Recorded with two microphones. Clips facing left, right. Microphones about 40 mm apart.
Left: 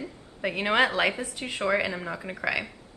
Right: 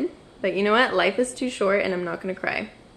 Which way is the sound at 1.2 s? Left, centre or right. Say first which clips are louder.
Right 8 dB; centre.